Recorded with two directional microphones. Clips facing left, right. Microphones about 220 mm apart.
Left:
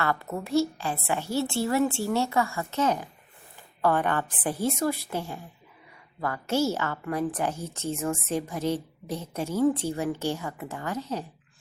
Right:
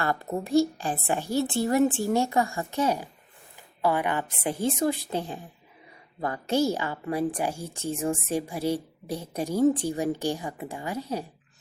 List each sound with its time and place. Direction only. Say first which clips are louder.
0.3 s a woman's voice: right 3 dB; 35° right (ahead or behind)
0.5 s a woman's voice: right 2 dB; 15° right (ahead or behind)
0.9 s a woman's voice: right 2 dB; 35° right (ahead or behind)
1.2 s a woman's voice: right 1 dB; 15° right (ahead or behind)